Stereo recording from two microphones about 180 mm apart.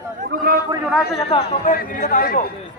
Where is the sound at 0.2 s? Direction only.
55° right (ahead or behind).